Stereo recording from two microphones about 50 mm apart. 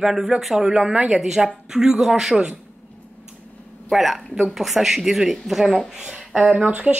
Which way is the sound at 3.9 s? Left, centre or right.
Centre.